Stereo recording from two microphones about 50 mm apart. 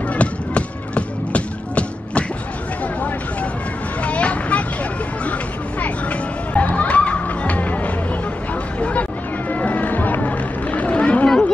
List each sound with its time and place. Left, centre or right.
0.1 s music: left
4.0 s vehicle: left
5.8 s music: left
8.7 s vehicle: left
9.5 s music: left
11.2 s a sound: centre